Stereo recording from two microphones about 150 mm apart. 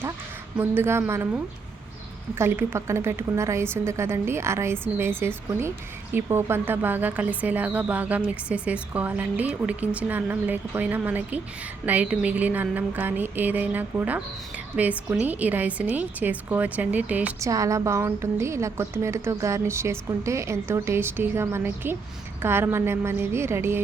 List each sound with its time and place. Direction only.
0.5 s speech: 15° right (ahead or behind)
2.4 s speech: 15° right (ahead or behind)
17.4 s a woman's voice: 20° right (ahead or behind)